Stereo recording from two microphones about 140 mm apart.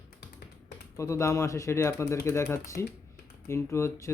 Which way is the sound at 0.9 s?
20° left (ahead or behind).